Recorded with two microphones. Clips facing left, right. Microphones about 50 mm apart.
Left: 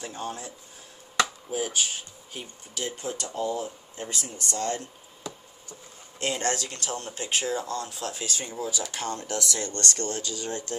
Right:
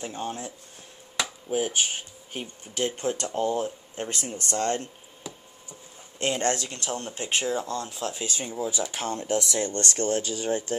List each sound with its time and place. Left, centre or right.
0.0 s speech: right
1.5 s speech: right
6.1 s speech: right